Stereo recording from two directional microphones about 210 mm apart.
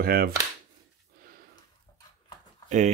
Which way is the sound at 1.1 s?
45° right (ahead or behind).